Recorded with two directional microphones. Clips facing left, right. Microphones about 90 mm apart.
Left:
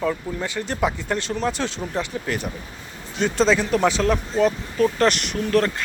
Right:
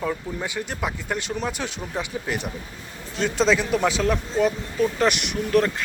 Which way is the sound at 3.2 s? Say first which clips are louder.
Left 2 dB; centre (ahead or behind).